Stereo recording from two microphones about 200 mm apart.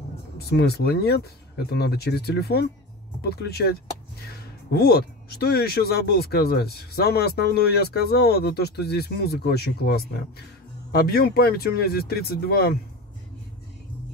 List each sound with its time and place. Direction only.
0.5 s speech: 50° left (ahead or behind)